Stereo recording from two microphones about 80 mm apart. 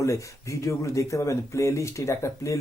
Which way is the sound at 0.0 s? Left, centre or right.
Left.